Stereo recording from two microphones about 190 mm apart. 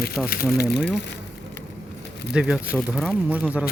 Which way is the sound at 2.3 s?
5° right (ahead or behind).